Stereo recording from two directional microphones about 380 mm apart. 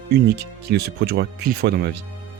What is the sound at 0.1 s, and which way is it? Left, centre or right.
Speech, right.